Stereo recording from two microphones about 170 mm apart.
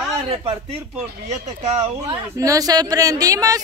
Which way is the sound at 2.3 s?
20° right (ahead or behind).